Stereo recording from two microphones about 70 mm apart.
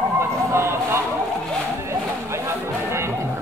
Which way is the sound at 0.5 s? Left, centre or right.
Right.